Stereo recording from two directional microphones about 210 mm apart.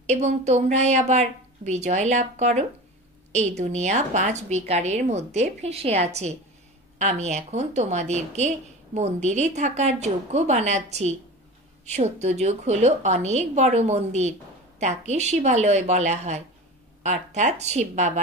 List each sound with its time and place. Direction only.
0.0 s a woman's voice: 30° right (ahead or behind)